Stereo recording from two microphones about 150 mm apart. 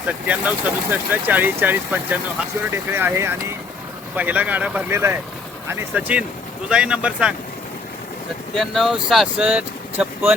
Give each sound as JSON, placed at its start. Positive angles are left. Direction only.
{"t": 0.3, "sound": "speech", "side_deg": -10}
{"t": 8.5, "sound": "speech", "side_deg": 0}